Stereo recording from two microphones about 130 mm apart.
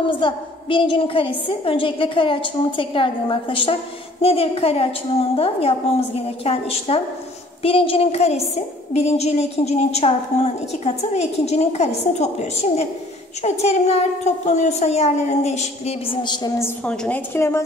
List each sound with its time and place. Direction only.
0.0 s a woman's voice: 40° left (ahead or behind)
16.2 s a woman's voice: 35° left (ahead or behind)
16.8 s a woman's voice: 5° left (ahead or behind)
17.3 s a woman's voice: 20° left (ahead or behind)